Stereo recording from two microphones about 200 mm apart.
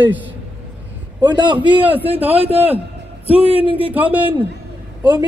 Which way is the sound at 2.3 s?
30° right (ahead or behind).